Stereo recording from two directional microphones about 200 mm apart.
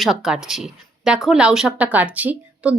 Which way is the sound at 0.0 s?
Centre (ahead or behind).